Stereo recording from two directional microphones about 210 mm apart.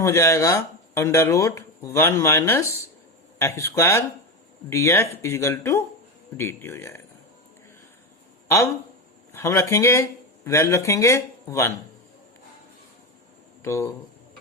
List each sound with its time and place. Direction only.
0.0 s speech: 15° left (ahead or behind)
8.4 s speech: 15° left (ahead or behind)
13.6 s speech: 15° left (ahead or behind)